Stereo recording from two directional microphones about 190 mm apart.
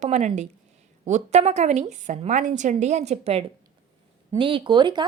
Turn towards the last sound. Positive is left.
turn(degrees=-25)  # may be behind; listen again after turning